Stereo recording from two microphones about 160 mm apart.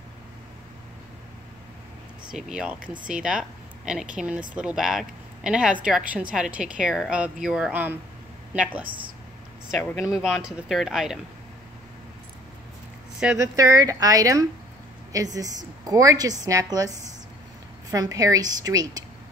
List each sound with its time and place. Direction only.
2.3 s speech: 5° right (ahead or behind)
8.8 s speech: 30° right (ahead or behind)
9.7 s speech: 5° left (ahead or behind)
13.4 s a woman's voice: 20° right (ahead or behind)
17.9 s a woman's voice: 20° right (ahead or behind)